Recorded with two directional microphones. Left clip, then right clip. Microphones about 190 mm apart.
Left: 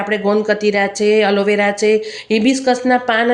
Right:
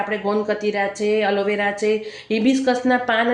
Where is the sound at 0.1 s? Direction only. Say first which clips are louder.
Left 6 dB; 30° left (ahead or behind).